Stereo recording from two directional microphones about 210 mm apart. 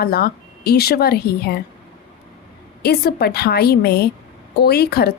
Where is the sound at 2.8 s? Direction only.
50° left (ahead or behind).